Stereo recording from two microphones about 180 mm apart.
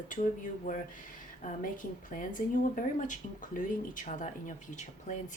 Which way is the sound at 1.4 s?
45° left (ahead or behind).